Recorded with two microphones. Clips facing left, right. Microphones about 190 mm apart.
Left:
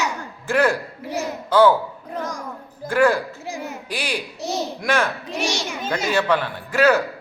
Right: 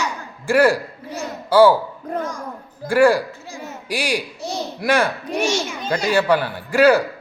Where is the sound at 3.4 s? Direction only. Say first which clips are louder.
Left 3 dB; 20° left (ahead or behind).